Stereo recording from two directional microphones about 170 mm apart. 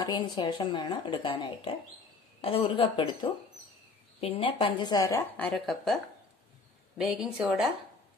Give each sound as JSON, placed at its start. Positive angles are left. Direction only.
{"t": 0.0, "sound": "speech", "side_deg": 25}
{"t": 5.5, "sound": "a woman's voice", "side_deg": 0}
{"t": 7.0, "sound": "a woman's voice", "side_deg": -5}